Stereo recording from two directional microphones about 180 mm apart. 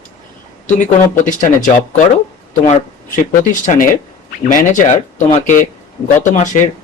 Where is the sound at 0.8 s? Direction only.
45° left (ahead or behind).